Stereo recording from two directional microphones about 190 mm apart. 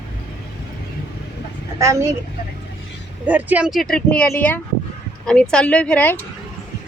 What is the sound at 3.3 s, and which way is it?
Speech, 10° right (ahead or behind).